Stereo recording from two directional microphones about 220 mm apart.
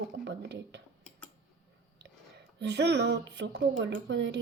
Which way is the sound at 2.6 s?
50° right (ahead or behind).